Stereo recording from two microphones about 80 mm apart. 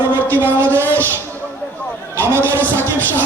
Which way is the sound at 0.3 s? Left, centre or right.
Right.